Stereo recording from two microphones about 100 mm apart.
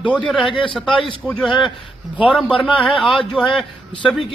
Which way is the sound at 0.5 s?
60° left (ahead or behind).